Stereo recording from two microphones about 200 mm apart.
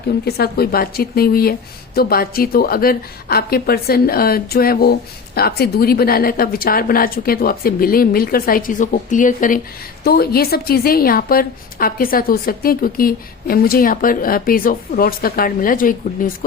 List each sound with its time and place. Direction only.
0.3 s a woman's voice: 50° left (ahead or behind)